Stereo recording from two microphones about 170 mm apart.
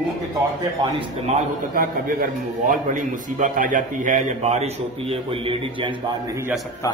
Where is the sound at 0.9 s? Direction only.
40° right (ahead or behind).